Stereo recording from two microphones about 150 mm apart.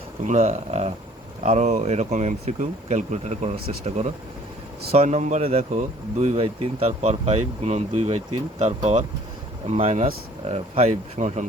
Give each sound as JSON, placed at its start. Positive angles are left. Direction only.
{"t": 0.3, "sound": "speech", "side_deg": -55}